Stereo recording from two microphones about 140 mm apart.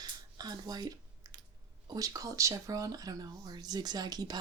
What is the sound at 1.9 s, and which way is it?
Speech, 25° right (ahead or behind).